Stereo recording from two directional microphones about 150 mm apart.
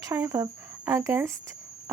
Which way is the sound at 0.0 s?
20° right (ahead or behind).